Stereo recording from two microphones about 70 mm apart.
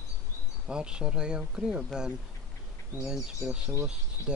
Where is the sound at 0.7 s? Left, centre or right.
Centre.